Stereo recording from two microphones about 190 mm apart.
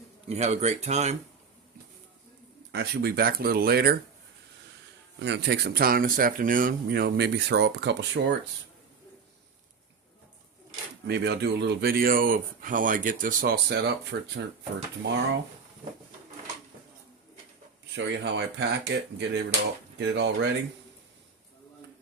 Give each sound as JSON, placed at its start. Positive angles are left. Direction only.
{"t": 0.3, "sound": "speech", "side_deg": -35}
{"t": 2.7, "sound": "speech", "side_deg": -55}
{"t": 5.2, "sound": "speech", "side_deg": -65}
{"t": 11.0, "sound": "speech", "side_deg": -60}
{"t": 17.9, "sound": "speech", "side_deg": -65}